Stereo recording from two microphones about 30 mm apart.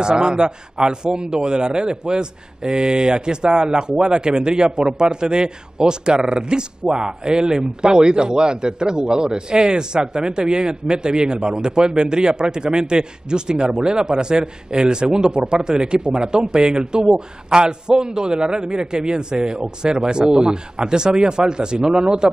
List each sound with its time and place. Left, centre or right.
0.0 s a man's voice: right